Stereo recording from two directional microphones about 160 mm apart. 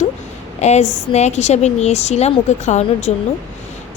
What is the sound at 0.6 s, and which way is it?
A woman's voice, 45° left (ahead or behind).